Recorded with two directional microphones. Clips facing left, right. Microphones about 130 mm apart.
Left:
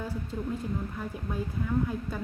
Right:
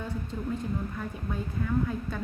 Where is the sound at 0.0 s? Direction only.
5° left (ahead or behind).